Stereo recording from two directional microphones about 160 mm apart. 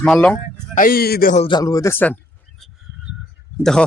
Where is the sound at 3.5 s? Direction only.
5° left (ahead or behind).